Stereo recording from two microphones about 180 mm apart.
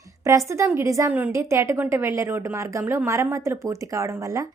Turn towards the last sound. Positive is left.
turn(degrees=-15)  # may be behind; listen again after turning